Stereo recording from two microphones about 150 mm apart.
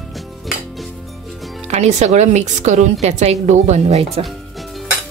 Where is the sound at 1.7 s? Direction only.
50° right (ahead or behind).